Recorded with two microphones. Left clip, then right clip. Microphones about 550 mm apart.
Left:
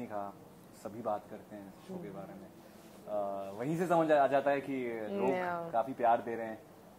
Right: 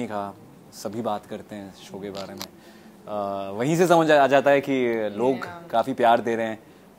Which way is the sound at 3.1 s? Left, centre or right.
Right.